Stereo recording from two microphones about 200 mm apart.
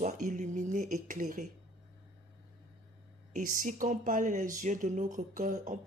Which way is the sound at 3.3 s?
45° right (ahead or behind).